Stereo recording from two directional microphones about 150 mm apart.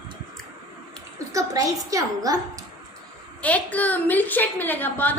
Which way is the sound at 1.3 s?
20° right (ahead or behind).